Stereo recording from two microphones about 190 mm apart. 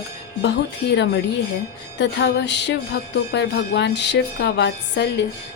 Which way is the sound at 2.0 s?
65° left (ahead or behind).